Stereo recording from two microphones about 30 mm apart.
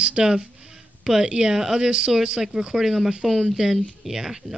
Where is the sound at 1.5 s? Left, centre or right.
Centre.